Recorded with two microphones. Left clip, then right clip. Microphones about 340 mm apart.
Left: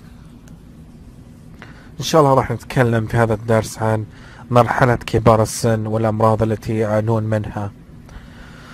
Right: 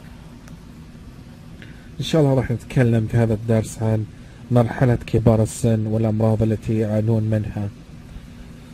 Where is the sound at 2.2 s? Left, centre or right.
Left.